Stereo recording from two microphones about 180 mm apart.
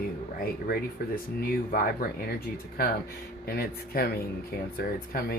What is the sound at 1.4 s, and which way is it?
Speech, 55° left (ahead or behind).